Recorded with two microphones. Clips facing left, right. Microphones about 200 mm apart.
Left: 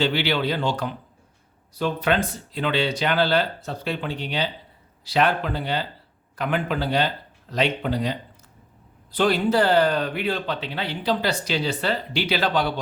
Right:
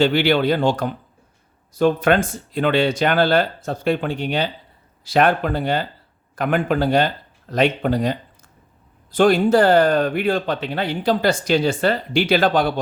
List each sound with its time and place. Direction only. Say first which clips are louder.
0.0 s speech: right 6 dB; 50° right (ahead or behind)